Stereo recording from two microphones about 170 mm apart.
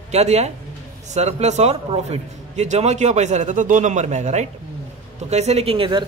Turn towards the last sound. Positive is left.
turn(degrees=-30)  # may be behind; listen again after turning